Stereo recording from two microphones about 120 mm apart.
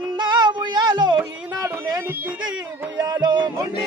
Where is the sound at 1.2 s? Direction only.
20° right (ahead or behind).